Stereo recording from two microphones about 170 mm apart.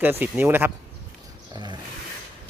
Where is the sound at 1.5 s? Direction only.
25° right (ahead or behind).